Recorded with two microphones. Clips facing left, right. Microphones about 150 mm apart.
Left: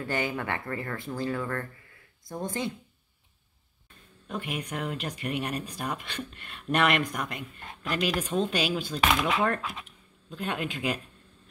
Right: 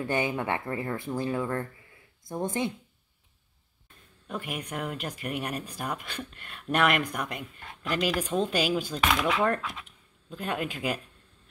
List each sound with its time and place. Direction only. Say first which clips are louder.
0.0 s speech: right 2 dB; 20° right (ahead or behind)
4.3 s speech: left 1 dB; centre (ahead or behind)
9.4 s speech: right 1 dB; centre (ahead or behind)